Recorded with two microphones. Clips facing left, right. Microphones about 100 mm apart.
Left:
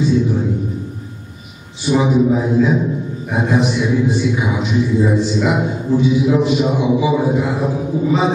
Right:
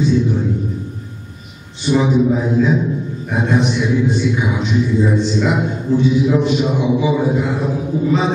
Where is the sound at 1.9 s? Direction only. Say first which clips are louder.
Even; 5° left (ahead or behind).